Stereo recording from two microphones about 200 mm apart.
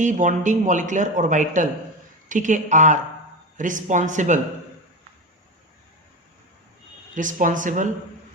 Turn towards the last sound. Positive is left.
turn(degrees=-40)  # may be behind; listen again after turning